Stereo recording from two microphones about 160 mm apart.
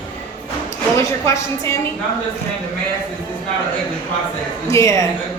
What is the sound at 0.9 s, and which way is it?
Speech, 20° left (ahead or behind).